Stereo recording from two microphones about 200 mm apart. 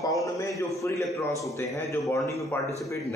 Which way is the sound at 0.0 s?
15° left (ahead or behind).